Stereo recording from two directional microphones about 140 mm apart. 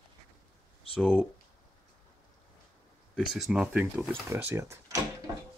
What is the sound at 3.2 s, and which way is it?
Speech, 5° right (ahead or behind).